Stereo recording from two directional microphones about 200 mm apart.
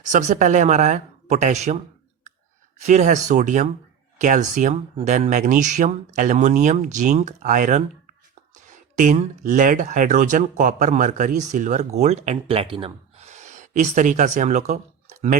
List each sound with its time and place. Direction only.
0.0 s speech: 40° right (ahead or behind)